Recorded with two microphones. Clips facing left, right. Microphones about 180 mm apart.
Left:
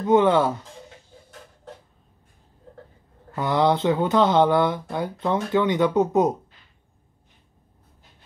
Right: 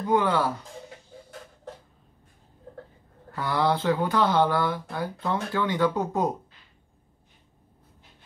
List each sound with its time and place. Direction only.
0.0 s speech: 20° left (ahead or behind)
3.3 s speech: 20° left (ahead or behind)